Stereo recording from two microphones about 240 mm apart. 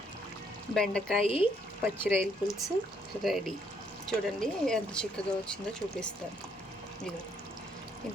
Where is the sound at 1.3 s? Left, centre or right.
Left.